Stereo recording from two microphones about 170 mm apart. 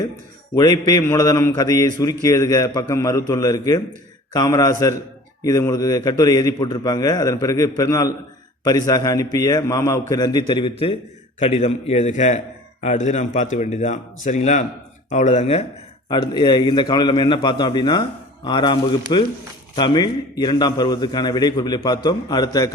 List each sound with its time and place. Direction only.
0.5 s a man's voice: 20° left (ahead or behind)
16.0 s a man's voice: 25° left (ahead or behind)